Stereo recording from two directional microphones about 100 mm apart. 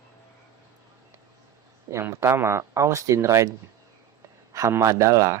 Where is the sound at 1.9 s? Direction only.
30° right (ahead or behind).